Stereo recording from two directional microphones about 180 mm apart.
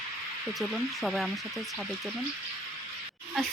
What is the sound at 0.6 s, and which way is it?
Speech, centre (ahead or behind).